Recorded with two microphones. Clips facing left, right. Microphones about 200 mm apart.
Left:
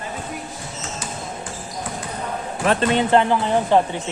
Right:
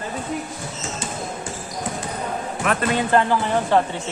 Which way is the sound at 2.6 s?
30° left (ahead or behind).